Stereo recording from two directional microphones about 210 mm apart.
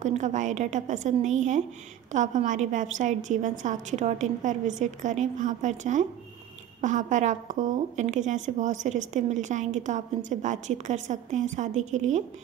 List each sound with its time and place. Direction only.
0.0 s speech: 35° right (ahead or behind)